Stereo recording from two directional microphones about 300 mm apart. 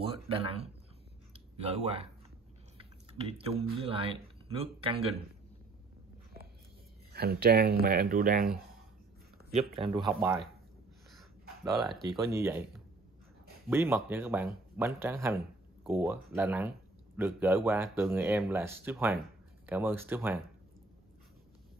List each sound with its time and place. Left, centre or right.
0.0 s speech: centre
1.3 s a sound: centre
2.8 s chewing: centre
3.7 s speech: centre
7.1 s speech: right
9.9 s speech: centre
11.7 s speech: centre
13.7 s speech: centre